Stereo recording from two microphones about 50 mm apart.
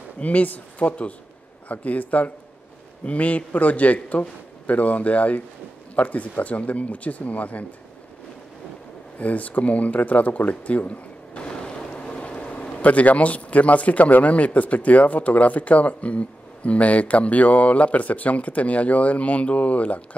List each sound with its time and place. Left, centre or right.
0.2 s a man's voice: left
9.2 s speech: left